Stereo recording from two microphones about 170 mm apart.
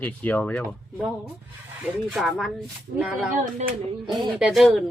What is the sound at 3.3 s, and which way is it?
Speech, 45° right (ahead or behind).